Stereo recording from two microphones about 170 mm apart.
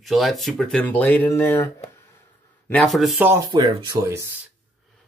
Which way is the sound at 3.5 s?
25° right (ahead or behind).